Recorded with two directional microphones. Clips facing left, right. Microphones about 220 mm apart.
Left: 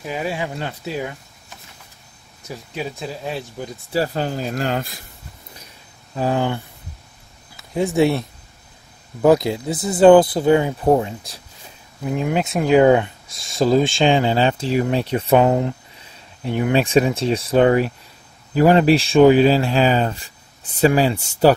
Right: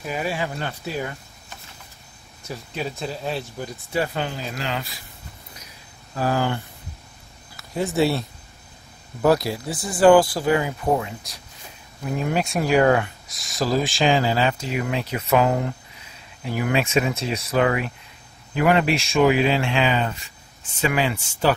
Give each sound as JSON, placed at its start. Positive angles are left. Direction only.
{"t": 0.0, "sound": "speech", "side_deg": 20}
{"t": 2.5, "sound": "speech", "side_deg": 5}
{"t": 3.9, "sound": "speech", "side_deg": 35}
{"t": 6.1, "sound": "speech", "side_deg": 25}
{"t": 7.7, "sound": "speech", "side_deg": 15}
{"t": 12.0, "sound": "speech", "side_deg": 15}